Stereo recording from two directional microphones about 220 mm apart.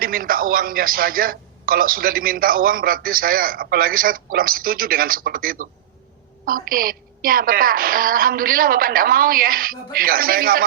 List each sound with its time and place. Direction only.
0.0 s a man's voice: 40° right (ahead or behind)